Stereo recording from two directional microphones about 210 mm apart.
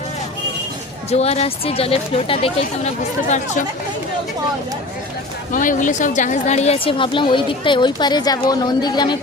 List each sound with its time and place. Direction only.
1.1 s a woman's voice: 30° left (ahead or behind)
5.5 s a woman's voice: 40° left (ahead or behind); by 9.1 s 20° left (ahead or behind)